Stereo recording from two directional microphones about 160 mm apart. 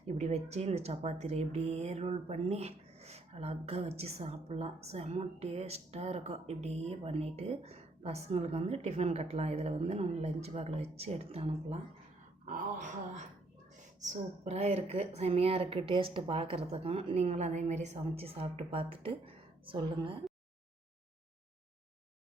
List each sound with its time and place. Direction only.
0.1 s speech: 45° right (ahead or behind)
12.5 s speech: 50° right (ahead or behind); by 20.1 s 30° right (ahead or behind)